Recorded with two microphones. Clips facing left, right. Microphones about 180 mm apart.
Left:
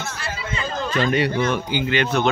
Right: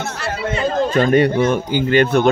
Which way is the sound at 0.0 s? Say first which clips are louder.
Right 7 dB; 65° right (ahead or behind).